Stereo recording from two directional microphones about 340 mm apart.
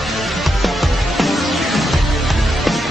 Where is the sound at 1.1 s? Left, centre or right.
Centre.